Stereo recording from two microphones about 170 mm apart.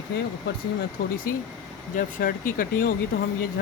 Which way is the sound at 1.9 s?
55° left (ahead or behind).